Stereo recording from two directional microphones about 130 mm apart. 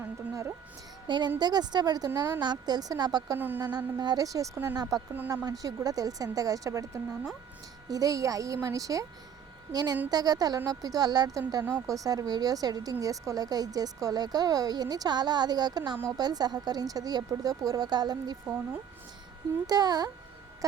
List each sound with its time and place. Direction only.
0.0 s speech: 20° right (ahead or behind)
1.0 s a woman's voice: 35° right (ahead or behind)
3.3 s speech: 15° right (ahead or behind)
3.6 s speech: 30° right (ahead or behind)
4.5 s speech: 15° right (ahead or behind)
4.8 s a woman's voice: 30° right (ahead or behind)
19.6 s a woman's voice: 30° right (ahead or behind)